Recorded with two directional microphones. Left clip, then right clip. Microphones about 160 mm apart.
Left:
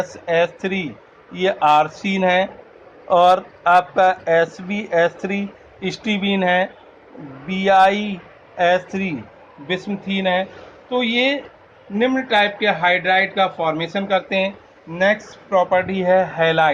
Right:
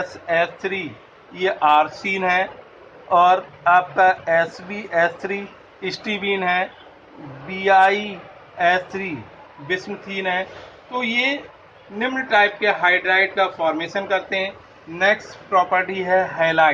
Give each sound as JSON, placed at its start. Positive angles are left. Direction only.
{"t": 0.3, "sound": "speech", "side_deg": 65}